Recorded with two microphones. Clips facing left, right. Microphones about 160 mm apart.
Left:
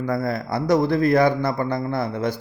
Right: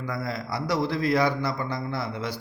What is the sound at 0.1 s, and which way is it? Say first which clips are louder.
Speech: left 6 dB; 50° left (ahead or behind).